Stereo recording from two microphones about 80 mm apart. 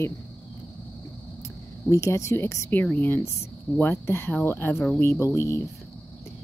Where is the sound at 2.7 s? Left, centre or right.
Left.